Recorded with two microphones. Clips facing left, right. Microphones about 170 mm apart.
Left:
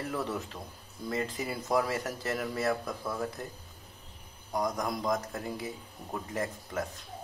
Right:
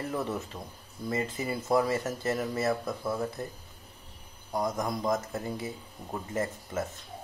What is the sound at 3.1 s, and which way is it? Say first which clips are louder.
Speech: right 2 dB; 5° right (ahead or behind).